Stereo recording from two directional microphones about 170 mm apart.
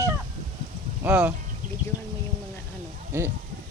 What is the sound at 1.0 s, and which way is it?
Speech, 10° right (ahead or behind).